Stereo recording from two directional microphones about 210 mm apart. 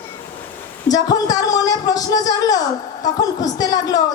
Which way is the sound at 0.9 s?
15° left (ahead or behind).